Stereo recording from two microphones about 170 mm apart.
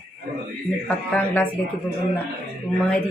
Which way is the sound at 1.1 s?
10° left (ahead or behind).